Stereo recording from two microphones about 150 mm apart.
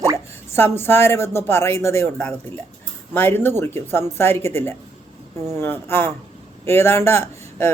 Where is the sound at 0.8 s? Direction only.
15° left (ahead or behind).